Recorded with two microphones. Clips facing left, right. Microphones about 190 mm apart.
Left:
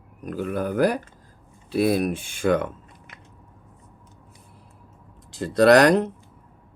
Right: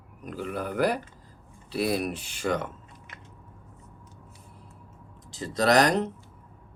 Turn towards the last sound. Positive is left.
turn(degrees=60)  # may be behind; listen again after turning